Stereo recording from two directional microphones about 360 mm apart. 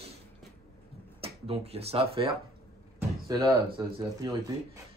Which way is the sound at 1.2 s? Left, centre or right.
Centre.